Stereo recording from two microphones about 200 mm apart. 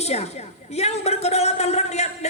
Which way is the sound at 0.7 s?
30° left (ahead or behind).